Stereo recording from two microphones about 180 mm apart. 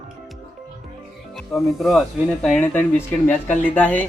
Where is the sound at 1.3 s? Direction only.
Centre (ahead or behind).